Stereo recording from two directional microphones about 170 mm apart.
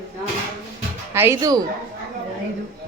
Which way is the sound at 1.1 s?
15° right (ahead or behind).